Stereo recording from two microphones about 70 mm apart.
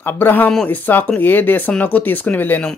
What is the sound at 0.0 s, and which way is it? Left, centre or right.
Speech, left.